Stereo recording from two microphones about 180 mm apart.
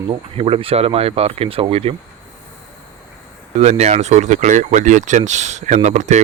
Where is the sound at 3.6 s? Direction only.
40° right (ahead or behind).